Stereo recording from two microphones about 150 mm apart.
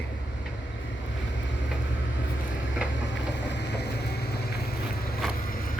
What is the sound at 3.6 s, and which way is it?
Vehicle, 90° left.